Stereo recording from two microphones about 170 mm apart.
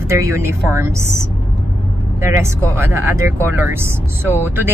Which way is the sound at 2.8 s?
15° right (ahead or behind).